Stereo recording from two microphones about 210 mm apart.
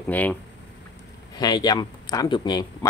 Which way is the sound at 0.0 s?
10° left (ahead or behind).